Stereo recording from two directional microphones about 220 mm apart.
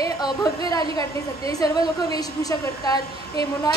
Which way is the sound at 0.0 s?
15° left (ahead or behind).